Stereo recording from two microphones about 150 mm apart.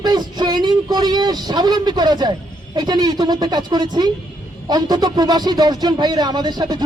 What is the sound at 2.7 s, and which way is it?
Speech, 25° right (ahead or behind).